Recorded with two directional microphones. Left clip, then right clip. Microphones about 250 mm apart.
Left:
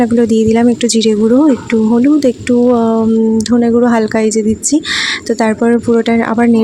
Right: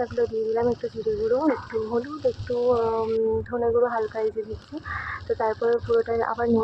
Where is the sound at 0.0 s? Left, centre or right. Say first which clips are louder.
Left 13 dB; left.